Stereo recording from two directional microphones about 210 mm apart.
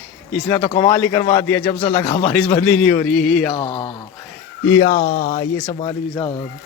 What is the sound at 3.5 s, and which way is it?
Speech, 25° left (ahead or behind).